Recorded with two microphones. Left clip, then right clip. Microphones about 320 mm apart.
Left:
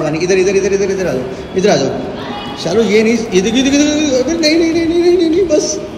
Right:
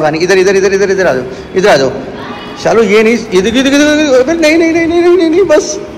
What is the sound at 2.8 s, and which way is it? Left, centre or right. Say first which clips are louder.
Speech: right 2 dB; centre.